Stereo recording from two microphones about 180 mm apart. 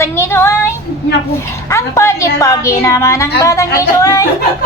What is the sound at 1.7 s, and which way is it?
A woman's voice, 15° left (ahead or behind).